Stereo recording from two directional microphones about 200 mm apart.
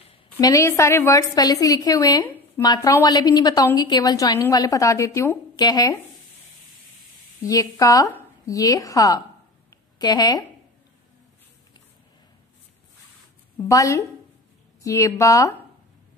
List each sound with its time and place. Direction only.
0.1 s a woman's voice: 20° left (ahead or behind)
7.4 s a woman's voice: 15° left (ahead or behind)
9.7 s a sound: 20° left (ahead or behind)
13.7 s a woman's voice: 15° left (ahead or behind)